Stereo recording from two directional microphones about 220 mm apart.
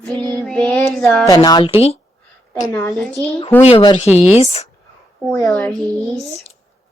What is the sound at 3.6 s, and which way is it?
A woman's voice, 20° left (ahead or behind).